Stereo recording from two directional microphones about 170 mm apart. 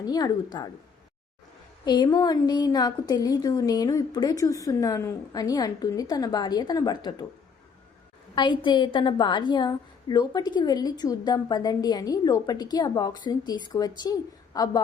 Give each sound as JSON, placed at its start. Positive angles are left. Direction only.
{"t": 0.0, "sound": "a woman's voice", "side_deg": 25}
{"t": 1.8, "sound": "a woman's voice", "side_deg": 25}
{"t": 8.4, "sound": "a woman's voice", "side_deg": 25}